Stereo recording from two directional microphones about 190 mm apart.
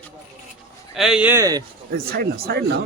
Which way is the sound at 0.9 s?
5° right (ahead or behind).